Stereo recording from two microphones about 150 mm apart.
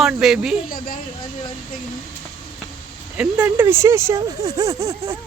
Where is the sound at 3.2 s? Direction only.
10° right (ahead or behind).